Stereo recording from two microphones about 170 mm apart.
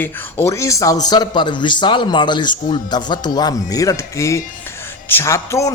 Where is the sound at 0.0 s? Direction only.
15° left (ahead or behind).